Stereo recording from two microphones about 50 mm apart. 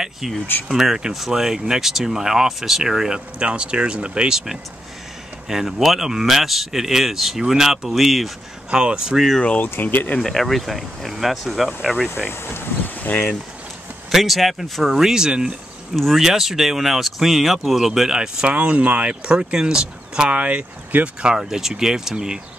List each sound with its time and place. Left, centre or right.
0.7 s speech: centre
8.6 s speech: centre
9.6 s speech: left
10.2 s speech: centre
12.5 s a sound: left
14.1 s speech: centre
16.0 s speech: centre; by 21.3 s right
21.3 s speech: centre